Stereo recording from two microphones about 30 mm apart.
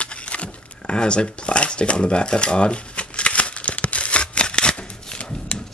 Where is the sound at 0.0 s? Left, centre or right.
Left.